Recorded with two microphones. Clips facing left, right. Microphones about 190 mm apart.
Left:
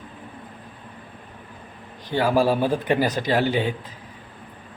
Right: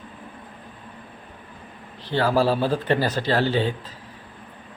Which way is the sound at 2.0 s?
15° left (ahead or behind).